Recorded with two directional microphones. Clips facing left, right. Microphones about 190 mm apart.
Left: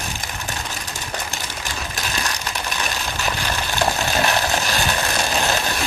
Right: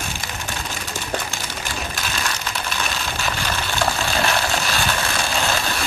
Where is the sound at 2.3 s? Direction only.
15° left (ahead or behind).